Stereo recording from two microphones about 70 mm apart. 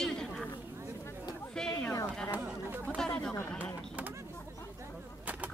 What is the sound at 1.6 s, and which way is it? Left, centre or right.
Speech, centre.